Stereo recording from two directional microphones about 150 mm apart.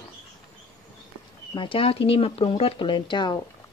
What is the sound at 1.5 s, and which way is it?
Speech, 35° left (ahead or behind).